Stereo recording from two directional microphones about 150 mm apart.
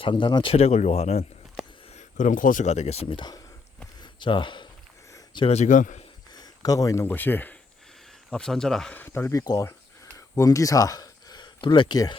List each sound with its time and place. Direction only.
0.0 s speech: 35° left (ahead or behind)
0.5 s speech: 45° left (ahead or behind)
4.0 s a sound: 30° left (ahead or behind)
5.5 s speech: 50° left (ahead or behind)
6.3 s speech: 25° left (ahead or behind)